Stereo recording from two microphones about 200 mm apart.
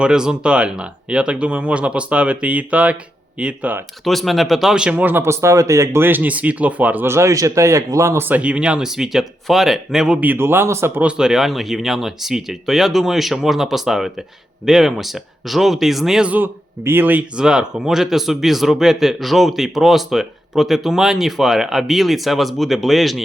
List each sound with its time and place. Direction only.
0.0 s speech: 5° right (ahead or behind)